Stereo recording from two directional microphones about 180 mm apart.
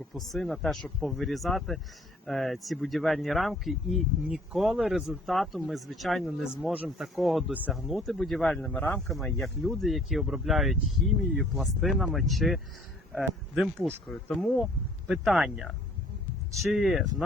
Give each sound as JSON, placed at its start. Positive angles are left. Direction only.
{"t": 0.1, "sound": "speech", "side_deg": 0}